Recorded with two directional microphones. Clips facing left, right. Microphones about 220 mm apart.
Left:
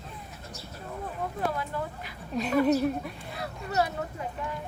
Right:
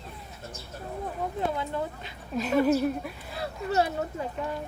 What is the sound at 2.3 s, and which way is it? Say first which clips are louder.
Speech: even; centre (ahead or behind).